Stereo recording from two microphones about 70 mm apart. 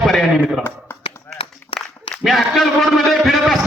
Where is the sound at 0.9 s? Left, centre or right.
Left.